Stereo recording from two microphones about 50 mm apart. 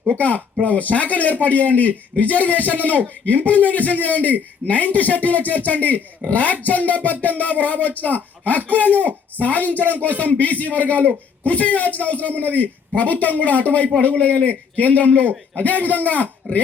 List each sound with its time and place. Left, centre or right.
0.2 s a man's voice: left